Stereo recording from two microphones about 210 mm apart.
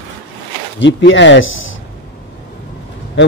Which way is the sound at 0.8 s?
60° left (ahead or behind).